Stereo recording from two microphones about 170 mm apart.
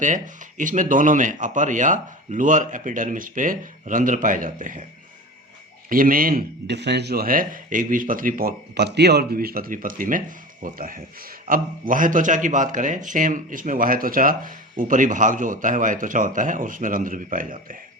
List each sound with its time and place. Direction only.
0.0 s speech: 50° right (ahead or behind)
5.9 s a man's voice: 55° right (ahead or behind)